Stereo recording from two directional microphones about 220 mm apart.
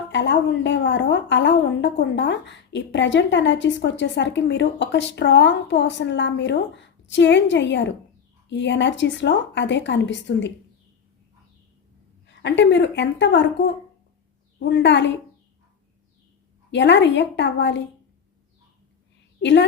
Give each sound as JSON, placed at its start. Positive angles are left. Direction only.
{"t": 0.1, "sound": "a woman's voice", "side_deg": 55}
{"t": 12.3, "sound": "a woman's voice", "side_deg": 55}
{"t": 14.7, "sound": "a woman's voice", "side_deg": 50}
{"t": 16.7, "sound": "a woman's voice", "side_deg": 55}
{"t": 19.4, "sound": "a woman's voice", "side_deg": 55}